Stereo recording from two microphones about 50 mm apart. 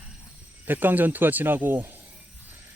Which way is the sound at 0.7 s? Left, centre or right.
Right.